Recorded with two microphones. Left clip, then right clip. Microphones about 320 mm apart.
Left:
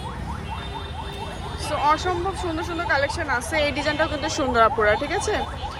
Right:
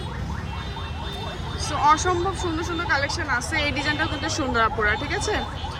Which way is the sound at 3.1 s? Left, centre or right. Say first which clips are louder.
Left 1 dB; centre.